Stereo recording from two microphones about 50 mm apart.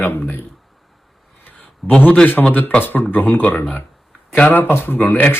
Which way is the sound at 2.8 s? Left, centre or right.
Left.